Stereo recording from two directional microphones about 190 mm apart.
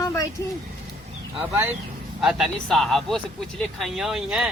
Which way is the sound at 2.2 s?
Centre (ahead or behind).